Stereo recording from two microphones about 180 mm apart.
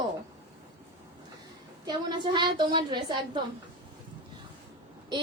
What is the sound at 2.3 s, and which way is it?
A woman's voice, 25° right (ahead or behind).